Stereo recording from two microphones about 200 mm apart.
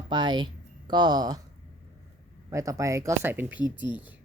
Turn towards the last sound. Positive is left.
turn(degrees=-5)  # may be behind; listen again after turning